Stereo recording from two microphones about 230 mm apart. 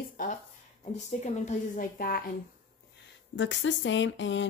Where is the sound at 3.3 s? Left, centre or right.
Left.